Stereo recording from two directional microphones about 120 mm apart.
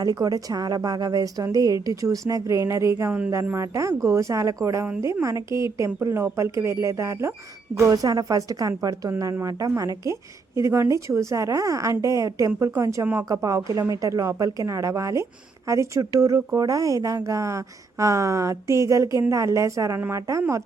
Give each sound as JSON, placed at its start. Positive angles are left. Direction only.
{"t": 0.0, "sound": "a woman's voice", "side_deg": -30}